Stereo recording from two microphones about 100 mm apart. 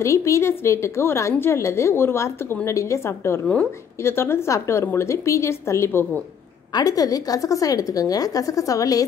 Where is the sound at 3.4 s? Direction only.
10° left (ahead or behind).